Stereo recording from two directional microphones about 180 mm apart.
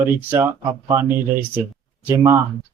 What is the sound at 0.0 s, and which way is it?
Speech, 10° right (ahead or behind).